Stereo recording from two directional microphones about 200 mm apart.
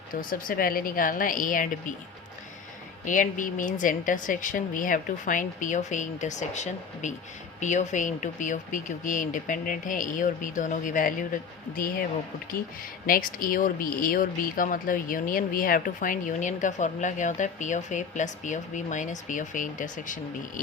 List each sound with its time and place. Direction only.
0.1 s a woman's voice: 45° left (ahead or behind)
3.0 s a woman's voice: 40° left (ahead or behind)
13.1 s speech: 45° left (ahead or behind)